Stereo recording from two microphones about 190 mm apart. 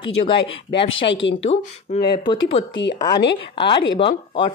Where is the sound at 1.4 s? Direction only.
30° left (ahead or behind).